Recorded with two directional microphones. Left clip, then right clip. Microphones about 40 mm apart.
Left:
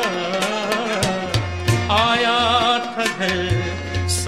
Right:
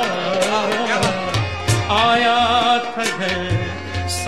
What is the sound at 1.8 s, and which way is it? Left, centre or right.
Music, right.